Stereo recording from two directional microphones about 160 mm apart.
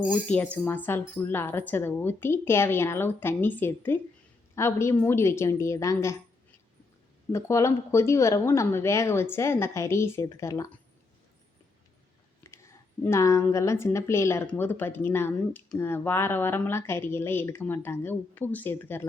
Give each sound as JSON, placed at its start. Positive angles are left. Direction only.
{"t": 0.1, "sound": "speech", "side_deg": 5}
{"t": 7.3, "sound": "speech", "side_deg": 20}
{"t": 12.4, "sound": "a woman's voice", "side_deg": 15}